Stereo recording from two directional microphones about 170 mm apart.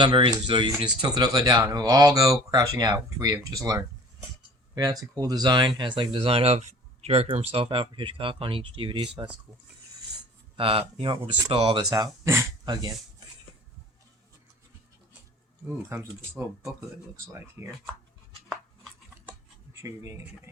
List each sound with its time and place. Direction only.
0.0 s speech: 30° right (ahead or behind)
10.6 s speech: 35° right (ahead or behind)
17.3 s speech: 15° right (ahead or behind)
19.8 s speech: 20° right (ahead or behind)